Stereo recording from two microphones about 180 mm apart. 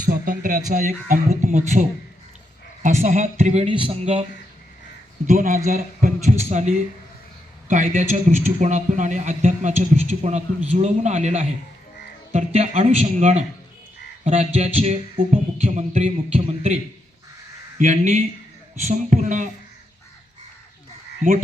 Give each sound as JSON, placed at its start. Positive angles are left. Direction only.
{"t": 0.0, "sound": "a man's voice", "side_deg": -50}
{"t": 12.5, "sound": "a man's voice", "side_deg": -40}
{"t": 17.7, "sound": "speech", "side_deg": -45}